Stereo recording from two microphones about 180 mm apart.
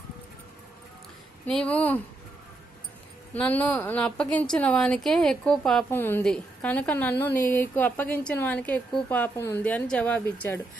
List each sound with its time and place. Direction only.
1.5 s a woman's voice: 5° left (ahead or behind)
3.3 s a woman's voice: 10° left (ahead or behind)